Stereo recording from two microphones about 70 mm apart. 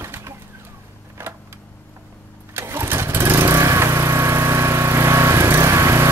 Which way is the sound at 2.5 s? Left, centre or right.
Right.